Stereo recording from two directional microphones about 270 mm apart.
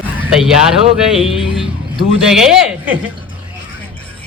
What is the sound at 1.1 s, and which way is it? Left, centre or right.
A man's voice, centre.